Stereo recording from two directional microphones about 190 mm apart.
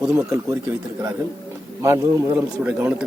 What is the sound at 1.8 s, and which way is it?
Speech, 10° right (ahead or behind).